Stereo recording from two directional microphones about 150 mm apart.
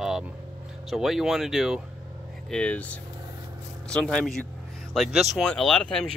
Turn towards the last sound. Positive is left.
turn(degrees=5)  # may be behind; listen again after turning